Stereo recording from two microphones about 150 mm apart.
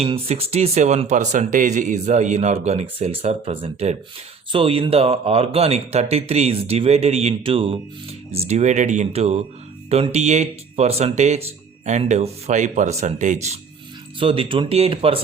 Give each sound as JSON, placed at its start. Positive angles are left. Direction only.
{"t": 0.0, "sound": "speech", "side_deg": -40}
{"t": 14.2, "sound": "speech", "side_deg": -35}